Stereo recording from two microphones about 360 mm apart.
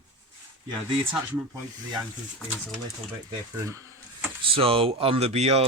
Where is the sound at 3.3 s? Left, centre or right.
Centre.